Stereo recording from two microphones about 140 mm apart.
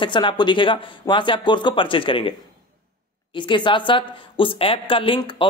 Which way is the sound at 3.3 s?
35° left (ahead or behind).